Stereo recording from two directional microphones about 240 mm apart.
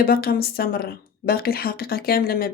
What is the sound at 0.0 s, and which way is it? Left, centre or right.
A woman's voice, left.